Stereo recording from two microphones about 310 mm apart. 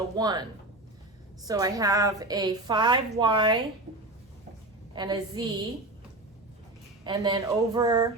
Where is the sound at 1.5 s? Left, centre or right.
Centre.